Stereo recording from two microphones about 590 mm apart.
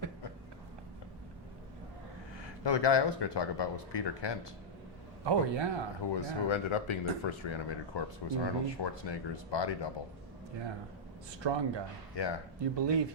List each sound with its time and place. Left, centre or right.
2.6 s speech: left
5.2 s speech: right
6.1 s speech: left
11.4 s speech: right
12.2 s speech: left
12.7 s speech: right